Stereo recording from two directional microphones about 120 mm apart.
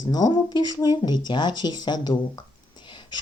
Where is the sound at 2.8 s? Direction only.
40° left (ahead or behind).